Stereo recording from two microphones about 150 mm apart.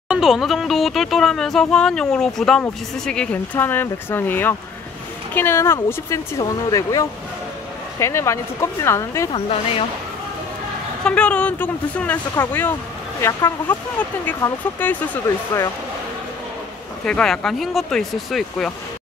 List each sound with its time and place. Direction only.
0.1 s speech: centre (ahead or behind); by 9.3 s 20° left (ahead or behind)
9.3 s speech: 40° left (ahead or behind)
11.1 s speech: 10° left (ahead or behind)
17.0 s speech: 5° left (ahead or behind)